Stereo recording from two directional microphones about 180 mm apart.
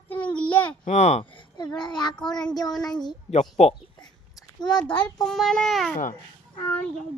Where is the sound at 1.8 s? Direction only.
25° left (ahead or behind).